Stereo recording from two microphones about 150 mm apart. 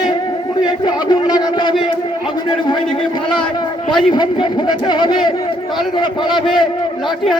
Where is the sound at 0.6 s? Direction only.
30° left (ahead or behind).